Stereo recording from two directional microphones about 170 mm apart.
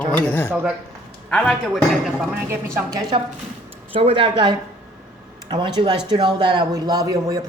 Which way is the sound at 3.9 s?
30° right (ahead or behind).